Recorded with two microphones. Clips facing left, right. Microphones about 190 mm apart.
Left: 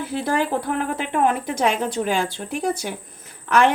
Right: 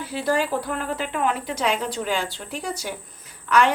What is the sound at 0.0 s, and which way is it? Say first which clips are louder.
Speech: left 1 dB; 55° left (ahead or behind).